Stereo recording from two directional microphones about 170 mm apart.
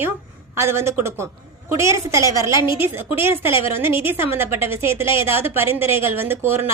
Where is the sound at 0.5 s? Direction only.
15° right (ahead or behind).